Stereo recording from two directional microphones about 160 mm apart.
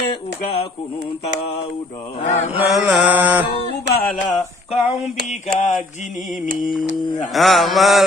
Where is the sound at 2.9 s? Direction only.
10° right (ahead or behind).